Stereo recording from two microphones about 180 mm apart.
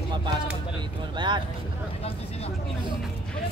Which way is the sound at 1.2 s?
25° right (ahead or behind).